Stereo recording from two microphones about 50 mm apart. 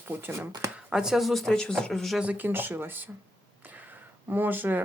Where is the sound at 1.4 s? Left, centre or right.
Centre.